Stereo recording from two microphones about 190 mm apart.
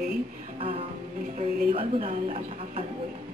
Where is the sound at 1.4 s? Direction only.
30° right (ahead or behind).